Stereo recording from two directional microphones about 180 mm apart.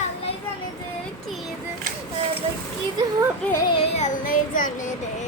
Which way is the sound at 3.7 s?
35° left (ahead or behind).